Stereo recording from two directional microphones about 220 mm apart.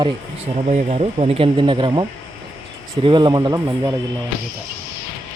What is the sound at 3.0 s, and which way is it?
Speech, 20° right (ahead or behind).